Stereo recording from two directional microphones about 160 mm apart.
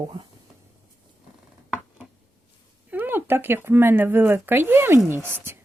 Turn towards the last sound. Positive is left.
turn(degrees=-15)  # may be behind; listen again after turning